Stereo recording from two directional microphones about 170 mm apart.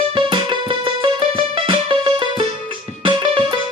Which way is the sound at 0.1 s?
30° right (ahead or behind).